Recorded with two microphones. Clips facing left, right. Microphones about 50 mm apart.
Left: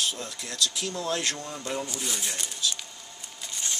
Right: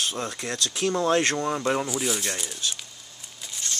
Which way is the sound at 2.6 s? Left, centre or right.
Right.